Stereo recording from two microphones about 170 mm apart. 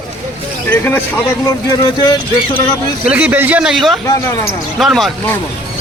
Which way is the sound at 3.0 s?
10° right (ahead or behind).